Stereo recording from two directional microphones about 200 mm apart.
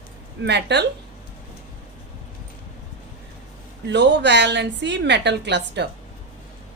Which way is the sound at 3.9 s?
60° right (ahead or behind).